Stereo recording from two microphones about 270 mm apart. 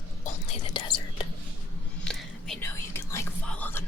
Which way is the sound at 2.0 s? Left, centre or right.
Centre.